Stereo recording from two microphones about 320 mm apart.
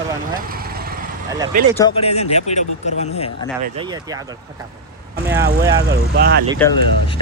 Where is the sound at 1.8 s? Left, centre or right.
Centre.